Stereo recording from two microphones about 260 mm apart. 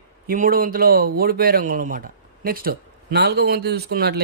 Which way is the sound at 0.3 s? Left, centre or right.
Right.